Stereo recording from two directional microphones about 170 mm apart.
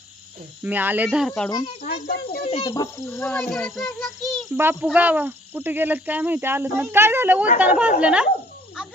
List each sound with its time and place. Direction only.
0.6 s speech: 10° right (ahead or behind)
1.5 s speech: 20° left (ahead or behind)
1.8 s a child's voice: 60° left (ahead or behind)
2.4 s speech: 35° left (ahead or behind)
2.6 s a child's voice: 20° left (ahead or behind); by 4.4 s 5° left (ahead or behind)
4.5 s speech: 10° right (ahead or behind)